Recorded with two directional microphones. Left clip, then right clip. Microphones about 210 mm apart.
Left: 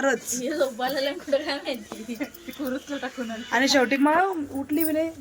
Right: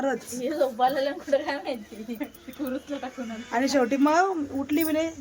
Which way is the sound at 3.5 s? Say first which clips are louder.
Left 3 dB; 5° right (ahead or behind).